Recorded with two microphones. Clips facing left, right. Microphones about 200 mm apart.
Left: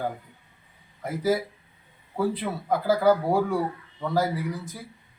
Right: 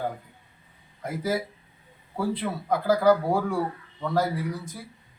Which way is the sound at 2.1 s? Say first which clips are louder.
Left 1 dB; centre (ahead or behind).